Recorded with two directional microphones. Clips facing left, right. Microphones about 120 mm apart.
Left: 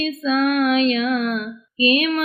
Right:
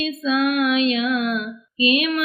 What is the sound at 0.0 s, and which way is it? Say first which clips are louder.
Female singing: left 1 dB; 40° left (ahead or behind).